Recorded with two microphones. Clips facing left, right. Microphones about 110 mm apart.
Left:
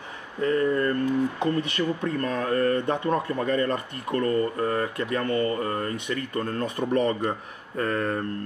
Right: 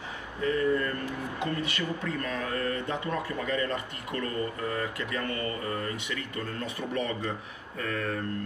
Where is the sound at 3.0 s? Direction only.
40° left (ahead or behind).